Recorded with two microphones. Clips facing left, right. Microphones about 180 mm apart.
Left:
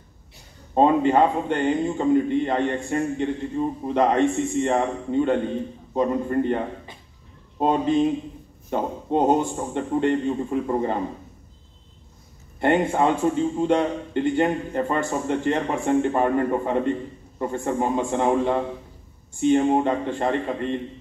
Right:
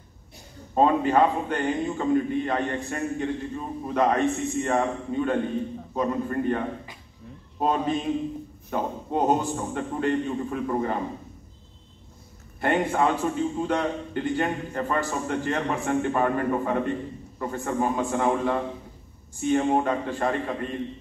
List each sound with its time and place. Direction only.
0.7 s a man's voice: 20° left (ahead or behind)
12.5 s a man's voice: 25° left (ahead or behind)